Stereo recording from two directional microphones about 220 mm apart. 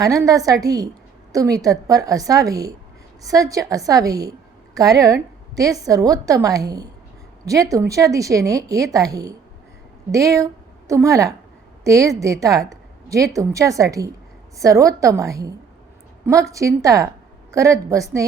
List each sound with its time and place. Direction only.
0.0 s a woman's voice: 15° right (ahead or behind)